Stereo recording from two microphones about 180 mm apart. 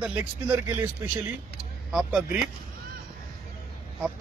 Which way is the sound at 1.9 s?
Centre (ahead or behind).